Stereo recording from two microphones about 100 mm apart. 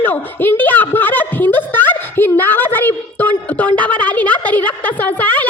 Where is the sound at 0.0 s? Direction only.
15° left (ahead or behind).